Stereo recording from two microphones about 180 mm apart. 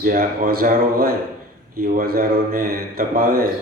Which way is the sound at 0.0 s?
55° right (ahead or behind).